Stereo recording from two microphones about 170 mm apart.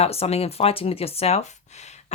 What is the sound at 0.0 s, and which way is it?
Speech, 35° left (ahead or behind).